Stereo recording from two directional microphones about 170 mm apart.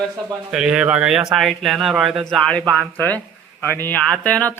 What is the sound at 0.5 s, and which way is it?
Speech, 5° right (ahead or behind).